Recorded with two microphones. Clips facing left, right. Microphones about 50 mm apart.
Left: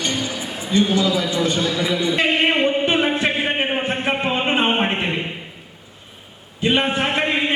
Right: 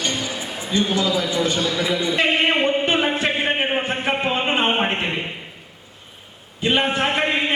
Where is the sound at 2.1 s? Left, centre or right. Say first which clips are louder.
Left 1 dB; centre.